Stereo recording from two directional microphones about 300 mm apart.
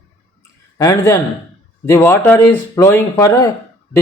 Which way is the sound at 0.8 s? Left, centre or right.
Centre.